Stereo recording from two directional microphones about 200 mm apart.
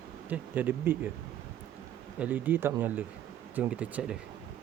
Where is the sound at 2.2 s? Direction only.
10° right (ahead or behind).